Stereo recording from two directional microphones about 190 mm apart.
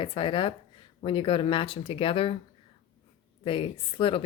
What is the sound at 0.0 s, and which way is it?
Speech, 25° left (ahead or behind).